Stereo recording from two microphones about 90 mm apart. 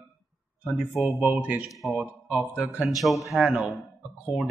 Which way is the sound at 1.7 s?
Centre (ahead or behind).